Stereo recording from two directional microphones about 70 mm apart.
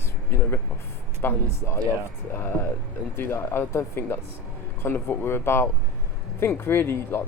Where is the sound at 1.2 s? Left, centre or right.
Left.